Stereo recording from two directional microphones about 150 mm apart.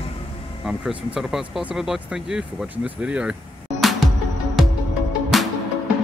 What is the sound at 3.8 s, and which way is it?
Music, centre (ahead or behind).